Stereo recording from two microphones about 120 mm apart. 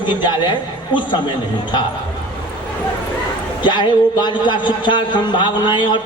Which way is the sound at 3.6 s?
40° left (ahead or behind).